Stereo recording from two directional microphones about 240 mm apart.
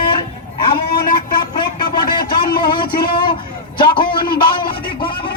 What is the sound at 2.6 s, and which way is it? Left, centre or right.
A man's voice, centre.